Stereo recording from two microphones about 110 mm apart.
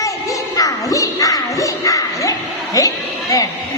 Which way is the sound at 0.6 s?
30° left (ahead or behind).